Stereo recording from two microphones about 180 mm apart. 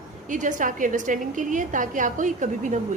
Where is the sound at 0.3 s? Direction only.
45° right (ahead or behind).